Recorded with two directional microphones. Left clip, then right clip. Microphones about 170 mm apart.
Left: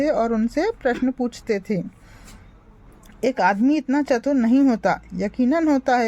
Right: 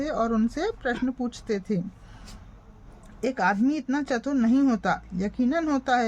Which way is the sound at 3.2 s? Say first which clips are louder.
Left 5 dB; 35° left (ahead or behind).